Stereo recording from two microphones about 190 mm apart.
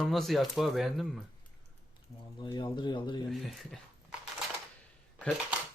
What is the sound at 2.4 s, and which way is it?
Speech, 25° left (ahead or behind).